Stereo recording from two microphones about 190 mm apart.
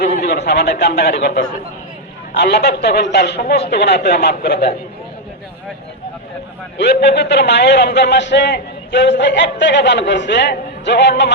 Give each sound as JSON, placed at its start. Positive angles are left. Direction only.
{"t": 0.2, "sound": "a man's voice", "side_deg": 60}
{"t": 6.7, "sound": "a man's voice", "side_deg": 60}